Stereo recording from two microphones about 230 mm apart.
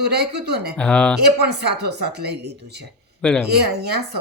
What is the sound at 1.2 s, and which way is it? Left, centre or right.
Speech, right.